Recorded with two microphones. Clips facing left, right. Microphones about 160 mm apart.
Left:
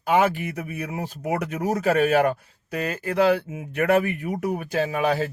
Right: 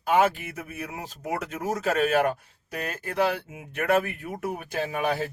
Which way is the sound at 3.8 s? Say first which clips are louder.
Left 4 dB; 60° left (ahead or behind).